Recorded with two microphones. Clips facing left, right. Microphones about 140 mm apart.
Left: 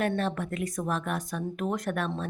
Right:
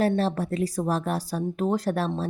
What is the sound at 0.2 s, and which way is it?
Speech, 35° right (ahead or behind).